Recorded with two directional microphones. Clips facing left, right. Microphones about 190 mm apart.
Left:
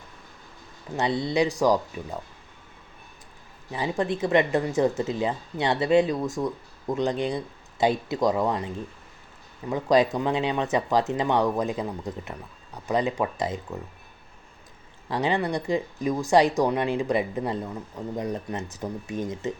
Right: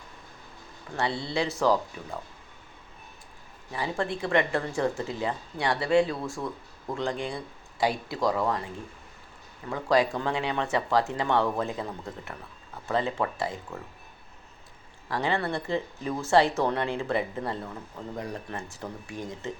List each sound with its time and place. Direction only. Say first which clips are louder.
0.9 s speech: left 5 dB; 20° left (ahead or behind)
3.7 s speech: left 4 dB; 20° left (ahead or behind)
15.1 s speech: left 3 dB; 20° left (ahead or behind)